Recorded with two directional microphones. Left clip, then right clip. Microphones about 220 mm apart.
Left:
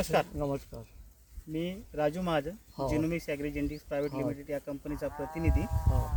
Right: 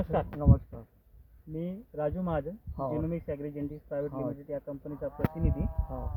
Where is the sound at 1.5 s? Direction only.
10° left (ahead or behind).